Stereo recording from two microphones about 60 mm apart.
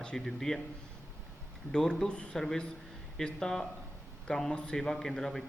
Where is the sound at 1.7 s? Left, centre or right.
Centre.